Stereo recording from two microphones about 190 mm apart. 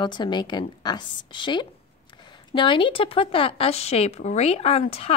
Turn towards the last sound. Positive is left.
turn(degrees=30)  # may be behind; listen again after turning